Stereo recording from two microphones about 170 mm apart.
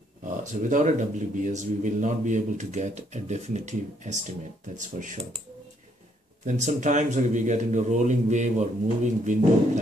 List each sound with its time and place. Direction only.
0.4 s speech: 45° right (ahead or behind)
6.4 s speech: 45° right (ahead or behind)